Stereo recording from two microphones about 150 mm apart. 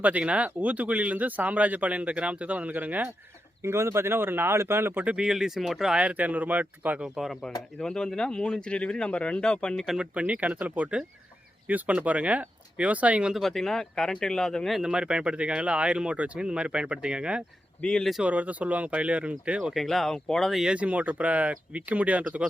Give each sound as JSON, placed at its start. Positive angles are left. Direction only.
{"t": 0.0, "sound": "speech", "side_deg": -10}
{"t": 17.7, "sound": "speech", "side_deg": 5}